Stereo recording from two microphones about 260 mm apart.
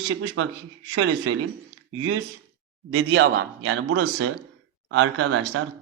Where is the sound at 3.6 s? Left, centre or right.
Right.